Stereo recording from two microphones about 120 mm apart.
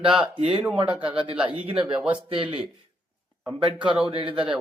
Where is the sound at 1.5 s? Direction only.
50° right (ahead or behind).